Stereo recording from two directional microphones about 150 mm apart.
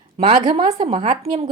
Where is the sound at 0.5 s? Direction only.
40° right (ahead or behind).